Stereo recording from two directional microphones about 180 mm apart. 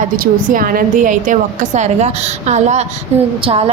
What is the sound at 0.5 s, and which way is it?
A woman's voice, 55° right (ahead or behind).